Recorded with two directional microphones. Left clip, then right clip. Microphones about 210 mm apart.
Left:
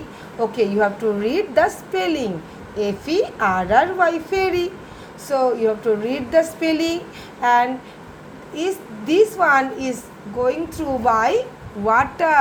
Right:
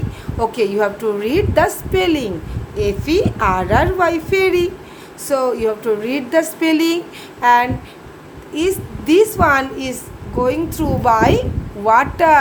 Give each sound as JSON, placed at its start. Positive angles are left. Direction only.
{"t": 0.3, "sound": "a woman's voice", "side_deg": -20}